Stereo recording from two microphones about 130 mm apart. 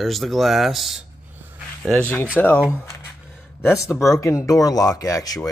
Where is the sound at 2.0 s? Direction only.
15° left (ahead or behind).